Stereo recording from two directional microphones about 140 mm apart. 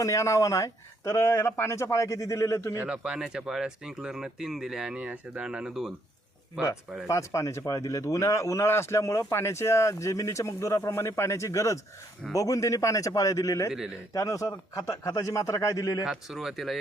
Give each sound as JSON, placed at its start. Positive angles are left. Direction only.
{"t": 0.0, "sound": "speech", "side_deg": 20}
{"t": 2.7, "sound": "speech", "side_deg": -10}
{"t": 7.1, "sound": "speech", "side_deg": 20}
{"t": 13.7, "sound": "speech", "side_deg": -5}
{"t": 14.1, "sound": "speech", "side_deg": 25}
{"t": 16.0, "sound": "speech", "side_deg": 0}